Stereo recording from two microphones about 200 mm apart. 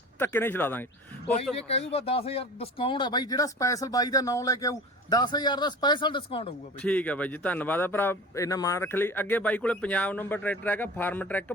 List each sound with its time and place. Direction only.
0.2 s a man's voice: 10° left (ahead or behind)
1.5 s speech: 30° left (ahead or behind)
6.8 s a man's voice: 5° left (ahead or behind)